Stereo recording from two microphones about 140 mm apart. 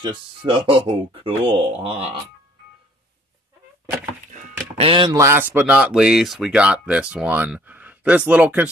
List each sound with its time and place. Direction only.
0.0 s speech: 35° right (ahead or behind)
4.3 s a sound: 60° right (ahead or behind)
4.8 s speech: 35° right (ahead or behind)
5.1 s speech: 20° right (ahead or behind)